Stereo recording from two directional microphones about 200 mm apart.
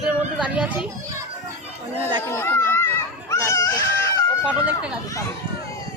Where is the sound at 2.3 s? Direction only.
10° left (ahead or behind).